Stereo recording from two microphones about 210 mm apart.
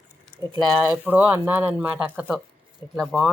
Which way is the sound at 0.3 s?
25° right (ahead or behind).